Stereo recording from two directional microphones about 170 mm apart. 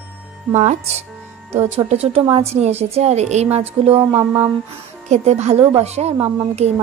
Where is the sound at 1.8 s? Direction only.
35° right (ahead or behind).